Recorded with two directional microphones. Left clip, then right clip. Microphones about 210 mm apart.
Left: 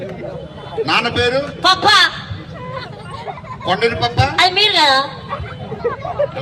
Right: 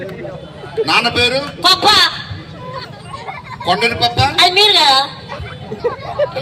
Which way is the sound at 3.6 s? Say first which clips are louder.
Right 2 dB; 35° right (ahead or behind).